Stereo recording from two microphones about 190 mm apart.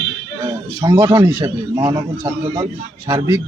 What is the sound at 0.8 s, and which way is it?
A man's voice, 20° right (ahead or behind).